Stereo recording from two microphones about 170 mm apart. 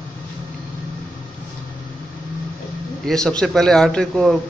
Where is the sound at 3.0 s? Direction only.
5° left (ahead or behind).